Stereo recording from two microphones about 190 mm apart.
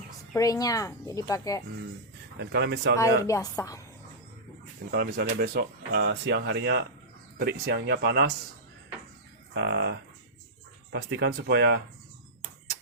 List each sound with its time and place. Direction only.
0.3 s speech: 20° left (ahead or behind)
2.4 s speech: 65° right (ahead or behind)
3.0 s speech: 15° left (ahead or behind)
4.9 s speech: 55° right (ahead or behind)
9.6 s speech: 65° right (ahead or behind)